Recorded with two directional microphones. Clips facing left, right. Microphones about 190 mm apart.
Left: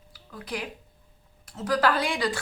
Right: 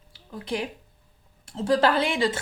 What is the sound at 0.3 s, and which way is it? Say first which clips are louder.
A woman's voice: right 5 dB; 25° right (ahead or behind).